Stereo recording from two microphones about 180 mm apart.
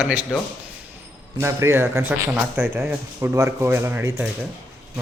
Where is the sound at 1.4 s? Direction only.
15° right (ahead or behind).